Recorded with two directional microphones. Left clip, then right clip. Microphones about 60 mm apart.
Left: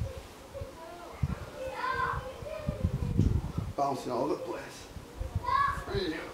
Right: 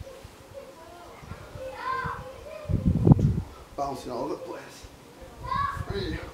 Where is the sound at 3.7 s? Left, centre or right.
Centre.